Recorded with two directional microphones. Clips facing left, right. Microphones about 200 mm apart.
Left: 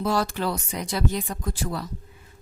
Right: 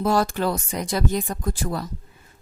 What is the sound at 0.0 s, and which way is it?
Speech, 50° right (ahead or behind).